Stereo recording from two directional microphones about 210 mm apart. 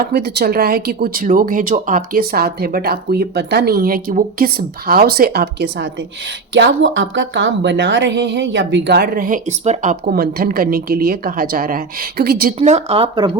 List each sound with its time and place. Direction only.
0.0 s speech: 50° right (ahead or behind)
12.5 s speech: 30° right (ahead or behind)